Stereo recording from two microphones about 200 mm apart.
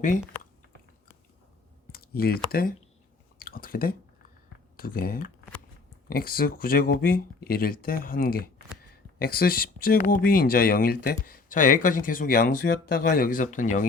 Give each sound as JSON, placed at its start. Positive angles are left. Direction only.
{"t": 1.9, "sound": "speech", "side_deg": 50}